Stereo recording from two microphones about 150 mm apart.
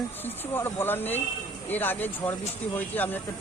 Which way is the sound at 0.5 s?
15° left (ahead or behind).